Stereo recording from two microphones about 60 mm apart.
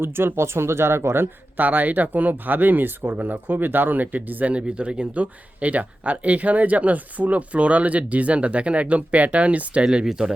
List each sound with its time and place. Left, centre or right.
0.0 s speech: right
1.6 s speech: right; by 10.3 s centre